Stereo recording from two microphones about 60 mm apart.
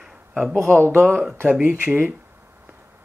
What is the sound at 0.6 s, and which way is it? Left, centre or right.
Speech, right.